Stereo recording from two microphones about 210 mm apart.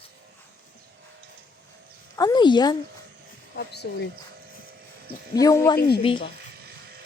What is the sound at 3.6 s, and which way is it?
Speech, 50° left (ahead or behind).